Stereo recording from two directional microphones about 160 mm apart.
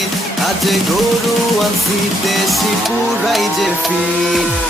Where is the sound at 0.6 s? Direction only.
Centre (ahead or behind).